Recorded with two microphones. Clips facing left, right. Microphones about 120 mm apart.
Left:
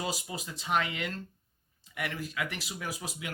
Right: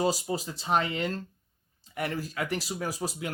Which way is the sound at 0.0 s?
35° right (ahead or behind).